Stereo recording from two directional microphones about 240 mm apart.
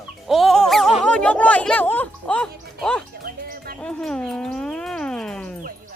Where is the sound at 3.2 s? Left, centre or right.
Right.